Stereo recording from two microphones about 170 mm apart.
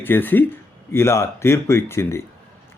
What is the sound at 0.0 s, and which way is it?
Speech, 10° left (ahead or behind).